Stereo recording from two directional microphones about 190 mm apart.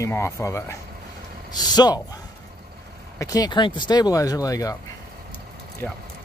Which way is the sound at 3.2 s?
20° left (ahead or behind).